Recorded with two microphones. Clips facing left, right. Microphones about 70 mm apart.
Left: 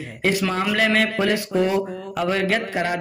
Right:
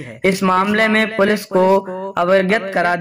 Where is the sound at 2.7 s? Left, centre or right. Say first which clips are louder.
Right 7 dB; right.